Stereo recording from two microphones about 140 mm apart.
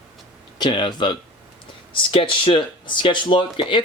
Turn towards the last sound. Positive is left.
turn(degrees=35)  # may be behind; listen again after turning